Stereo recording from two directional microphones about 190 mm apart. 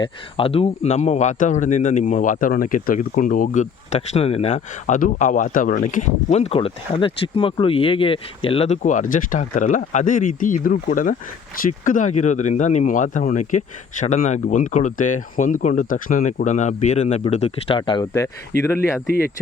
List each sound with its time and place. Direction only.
0.0 s speech: 30° left (ahead or behind)